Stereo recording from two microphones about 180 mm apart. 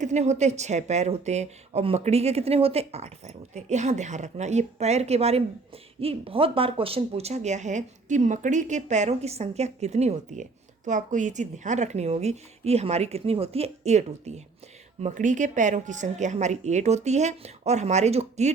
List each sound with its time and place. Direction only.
0.0 s speech: 40° right (ahead or behind)